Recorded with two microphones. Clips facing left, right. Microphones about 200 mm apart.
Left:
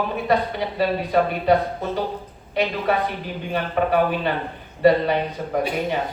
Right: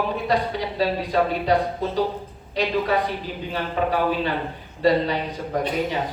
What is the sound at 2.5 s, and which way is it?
Speech, 55° left (ahead or behind).